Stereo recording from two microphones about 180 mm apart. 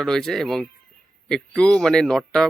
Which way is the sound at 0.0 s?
5° left (ahead or behind).